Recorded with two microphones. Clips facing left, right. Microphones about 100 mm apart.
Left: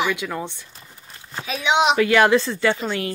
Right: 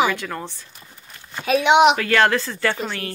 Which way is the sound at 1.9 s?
15° left (ahead or behind).